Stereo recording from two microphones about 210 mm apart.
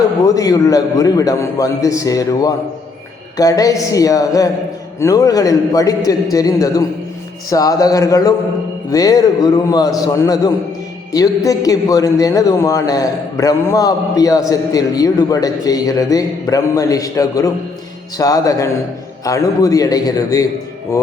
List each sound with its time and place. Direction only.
0.3 s a man's voice: 15° left (ahead or behind)